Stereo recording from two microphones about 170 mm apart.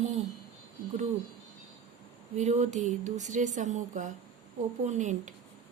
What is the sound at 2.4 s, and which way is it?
Speech, 45° right (ahead or behind).